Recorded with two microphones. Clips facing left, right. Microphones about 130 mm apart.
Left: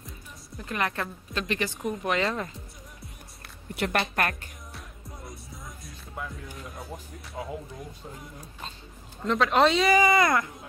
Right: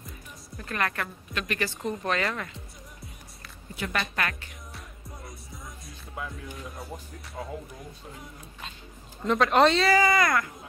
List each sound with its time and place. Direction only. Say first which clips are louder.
0.6 s a woman's voice: left 1 dB; 20° left (ahead or behind)
3.4 s a sound: left 5 dB; 60° left (ahead or behind)
4.0 s a woman's voice: left 3 dB; 45° left (ahead or behind)
5.9 s speech: even; centre (ahead or behind)
9.2 s speech: right 1 dB; centre (ahead or behind)
9.8 s a woman's voice: left 1 dB; 20° left (ahead or behind)